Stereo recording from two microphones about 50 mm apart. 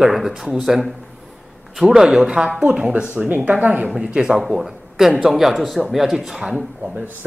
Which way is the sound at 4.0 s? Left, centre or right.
Right.